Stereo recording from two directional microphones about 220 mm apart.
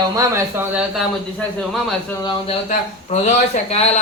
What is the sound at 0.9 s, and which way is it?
A man's voice, centre (ahead or behind).